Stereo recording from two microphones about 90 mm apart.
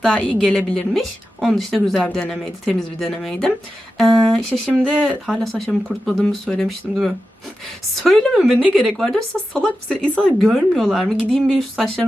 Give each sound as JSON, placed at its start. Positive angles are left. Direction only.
{"t": 0.2, "sound": "speech", "side_deg": 15}
{"t": 1.4, "sound": "speech", "side_deg": 0}
{"t": 8.3, "sound": "speech", "side_deg": -5}
{"t": 8.9, "sound": "speech", "side_deg": 5}
{"t": 10.3, "sound": "speech", "side_deg": 0}